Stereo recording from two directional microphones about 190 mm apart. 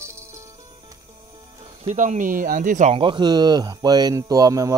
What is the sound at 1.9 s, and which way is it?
Speech, 40° right (ahead or behind).